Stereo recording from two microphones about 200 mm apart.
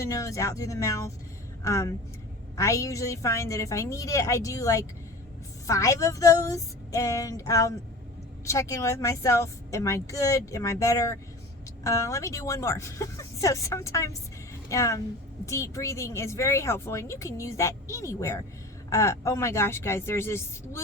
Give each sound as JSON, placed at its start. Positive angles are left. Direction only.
{"t": 0.0, "sound": "a woman's voice", "side_deg": 15}